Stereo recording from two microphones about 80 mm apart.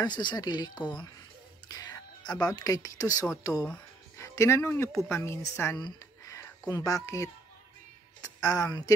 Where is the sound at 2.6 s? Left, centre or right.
Left.